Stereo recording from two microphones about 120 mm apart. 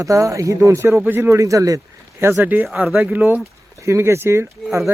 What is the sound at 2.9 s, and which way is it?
Speech, 15° right (ahead or behind).